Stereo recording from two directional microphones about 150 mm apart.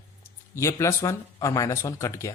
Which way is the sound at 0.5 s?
20° left (ahead or behind).